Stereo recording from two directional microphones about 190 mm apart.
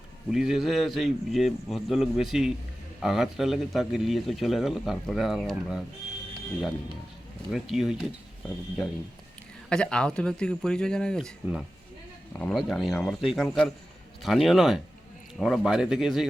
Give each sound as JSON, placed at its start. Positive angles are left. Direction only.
{"t": 0.3, "sound": "speech", "side_deg": 0}
{"t": 7.5, "sound": "speech", "side_deg": 0}
{"t": 12.4, "sound": "speech", "side_deg": 5}